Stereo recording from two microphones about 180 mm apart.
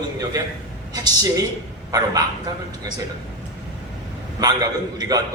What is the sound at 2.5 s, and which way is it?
Speech, 20° right (ahead or behind).